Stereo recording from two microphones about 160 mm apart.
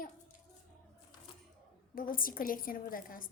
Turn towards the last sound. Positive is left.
turn(degrees=60)  # may be behind; listen again after turning